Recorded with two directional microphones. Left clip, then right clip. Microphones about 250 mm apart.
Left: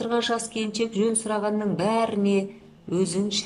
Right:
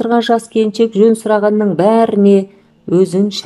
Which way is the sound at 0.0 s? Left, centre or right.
Right.